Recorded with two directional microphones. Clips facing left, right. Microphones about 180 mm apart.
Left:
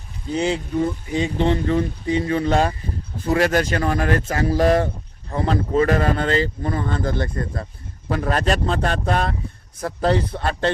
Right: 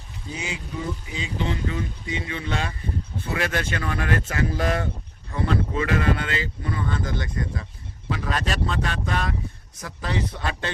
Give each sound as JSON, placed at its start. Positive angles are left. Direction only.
{"t": 0.3, "sound": "speech", "side_deg": 55}